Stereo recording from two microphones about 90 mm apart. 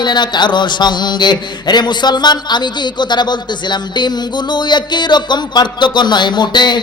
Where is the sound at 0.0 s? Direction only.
55° left (ahead or behind).